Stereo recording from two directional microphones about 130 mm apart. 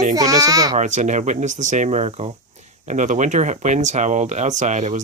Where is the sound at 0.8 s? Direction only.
70° right (ahead or behind); by 2.3 s 50° right (ahead or behind).